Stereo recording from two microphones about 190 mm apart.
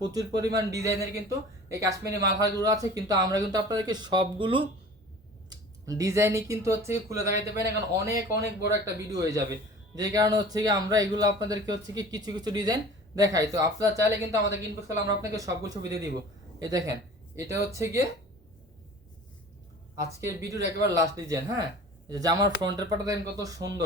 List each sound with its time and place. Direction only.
0.0 s a man's voice: 20° right (ahead or behind)
20.0 s a man's voice: 15° right (ahead or behind)